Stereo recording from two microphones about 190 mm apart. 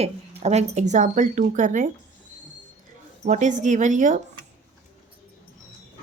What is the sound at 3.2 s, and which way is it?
A woman's voice, 40° right (ahead or behind).